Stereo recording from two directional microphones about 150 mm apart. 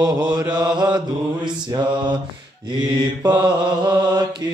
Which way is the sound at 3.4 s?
25° right (ahead or behind).